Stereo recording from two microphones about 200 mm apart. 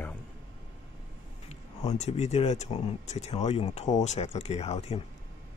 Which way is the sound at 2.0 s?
35° left (ahead or behind).